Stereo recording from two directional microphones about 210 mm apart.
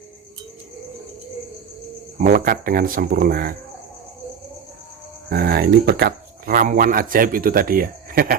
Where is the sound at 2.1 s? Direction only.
40° right (ahead or behind).